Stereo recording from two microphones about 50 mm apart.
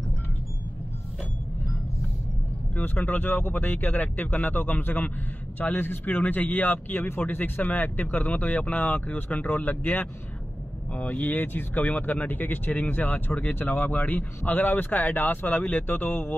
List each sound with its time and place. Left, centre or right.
2.7 s speech: left
10.9 s speech: left